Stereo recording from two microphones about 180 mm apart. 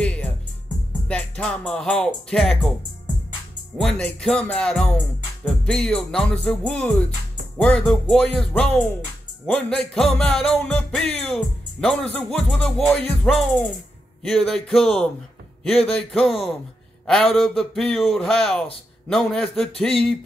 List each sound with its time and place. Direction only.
0.0 s music: 5° left (ahead or behind)
3.7 s music: 5° left (ahead or behind)